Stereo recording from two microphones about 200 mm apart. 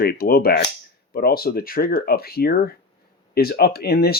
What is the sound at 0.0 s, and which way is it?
Speech, 50° left (ahead or behind).